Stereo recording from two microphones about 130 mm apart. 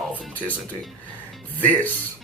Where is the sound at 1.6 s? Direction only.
10° left (ahead or behind).